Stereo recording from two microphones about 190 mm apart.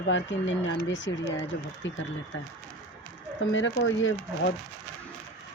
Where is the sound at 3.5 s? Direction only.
80° left.